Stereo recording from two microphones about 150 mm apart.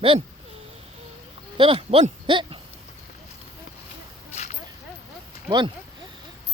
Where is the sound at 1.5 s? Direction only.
35° right (ahead or behind).